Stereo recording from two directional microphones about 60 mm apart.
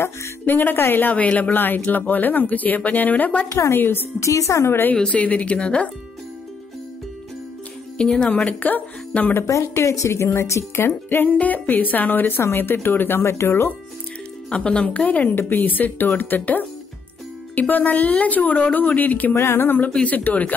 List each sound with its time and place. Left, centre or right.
0.5 s speech: left
3.4 s a woman's voice: left
3.7 s speech: left
4.2 s a woman's voice: left
4.6 s speech: left
5.1 s speech: left
8.0 s speech: centre
9.5 s a woman's voice: left
10.8 s speech: left
12.4 s a woman's voice: left
14.5 s speech: centre
19.3 s speech: left
19.9 s speech: left